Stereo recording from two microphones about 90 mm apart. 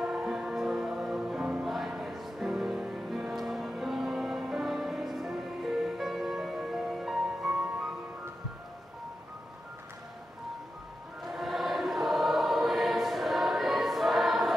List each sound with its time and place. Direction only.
0.0 s music: 5° right (ahead or behind)
11.2 s choir: centre (ahead or behind)